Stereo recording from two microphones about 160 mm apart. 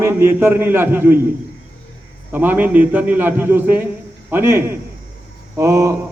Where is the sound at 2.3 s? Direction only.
10° right (ahead or behind).